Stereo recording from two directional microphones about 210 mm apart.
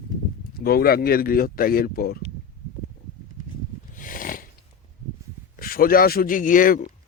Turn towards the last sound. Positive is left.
turn(degrees=40)  # may be behind; listen again after turning